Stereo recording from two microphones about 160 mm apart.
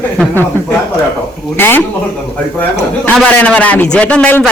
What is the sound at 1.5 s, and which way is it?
Speech, 15° left (ahead or behind).